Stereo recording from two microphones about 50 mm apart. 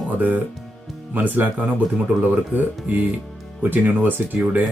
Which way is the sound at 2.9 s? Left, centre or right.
Right.